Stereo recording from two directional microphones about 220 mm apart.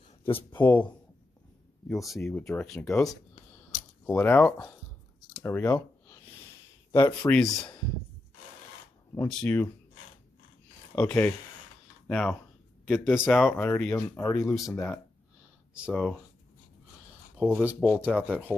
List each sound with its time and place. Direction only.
0.5 s speech: 10° left (ahead or behind)
1.9 s speech: centre (ahead or behind)
5.4 s a sound: 10° left (ahead or behind)
6.9 s speech: 15° left (ahead or behind)
7.2 s speech: 5° left (ahead or behind)
9.3 s speech: 5° left (ahead or behind)
11.0 s speech: 5° left (ahead or behind)
13.6 s speech: 10° left (ahead or behind)
14.5 s speech: centre (ahead or behind)
17.4 s speech: 5° left (ahead or behind)
17.6 s speech: 5° right (ahead or behind)